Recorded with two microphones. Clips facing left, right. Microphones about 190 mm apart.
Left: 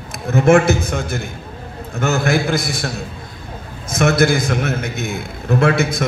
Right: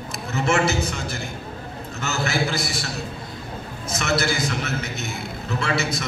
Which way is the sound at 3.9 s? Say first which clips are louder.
Left 9 dB; 55° left (ahead or behind).